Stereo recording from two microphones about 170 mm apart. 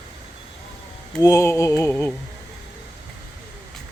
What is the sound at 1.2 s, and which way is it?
Speech, 20° left (ahead or behind).